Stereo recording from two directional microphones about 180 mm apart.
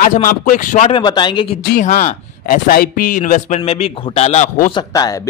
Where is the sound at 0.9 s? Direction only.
25° left (ahead or behind).